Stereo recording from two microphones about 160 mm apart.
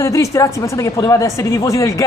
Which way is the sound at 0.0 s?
20° left (ahead or behind).